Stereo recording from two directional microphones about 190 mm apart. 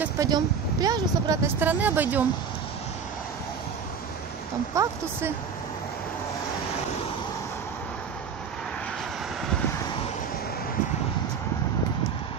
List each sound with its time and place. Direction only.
0.0 s speech: 20° right (ahead or behind)
4.7 s speech: 15° right (ahead or behind)